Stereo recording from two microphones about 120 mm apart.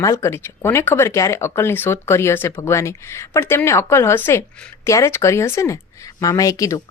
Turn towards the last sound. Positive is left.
turn(degrees=30)  # may be behind; listen again after turning